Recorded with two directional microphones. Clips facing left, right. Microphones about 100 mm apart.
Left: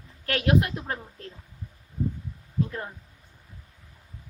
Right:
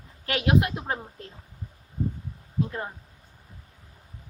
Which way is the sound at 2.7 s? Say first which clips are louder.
Right 2 dB; 20° right (ahead or behind).